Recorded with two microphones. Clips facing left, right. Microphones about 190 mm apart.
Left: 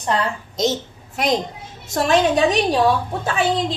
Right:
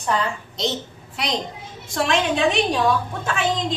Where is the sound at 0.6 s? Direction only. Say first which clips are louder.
Left 6 dB; 45° left (ahead or behind).